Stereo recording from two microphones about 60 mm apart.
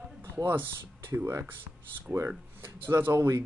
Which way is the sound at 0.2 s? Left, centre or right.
Right.